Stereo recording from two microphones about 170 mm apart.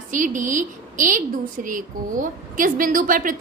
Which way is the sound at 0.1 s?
50° right (ahead or behind).